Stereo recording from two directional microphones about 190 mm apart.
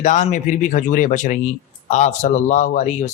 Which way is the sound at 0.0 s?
40° left (ahead or behind).